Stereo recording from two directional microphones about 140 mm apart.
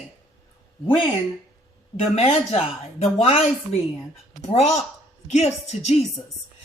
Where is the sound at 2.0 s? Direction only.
50° left (ahead or behind).